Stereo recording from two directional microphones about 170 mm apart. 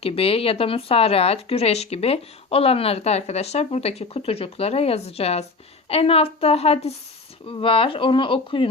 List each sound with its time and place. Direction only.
0.0 s speech: 35° left (ahead or behind)